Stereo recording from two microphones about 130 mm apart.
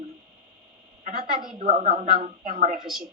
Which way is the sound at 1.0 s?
90° right.